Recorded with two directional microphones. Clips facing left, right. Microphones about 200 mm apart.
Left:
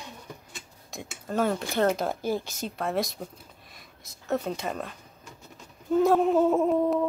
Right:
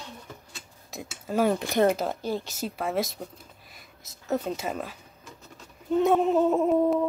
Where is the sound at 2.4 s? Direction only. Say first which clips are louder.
Right 1 dB; 5° right (ahead or behind).